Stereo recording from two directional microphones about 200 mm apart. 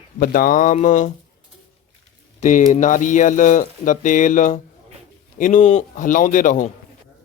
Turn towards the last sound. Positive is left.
turn(degrees=40)  # may be behind; listen again after turning